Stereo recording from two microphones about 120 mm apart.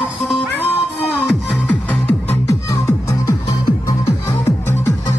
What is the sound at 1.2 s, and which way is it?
Music, 10° left (ahead or behind).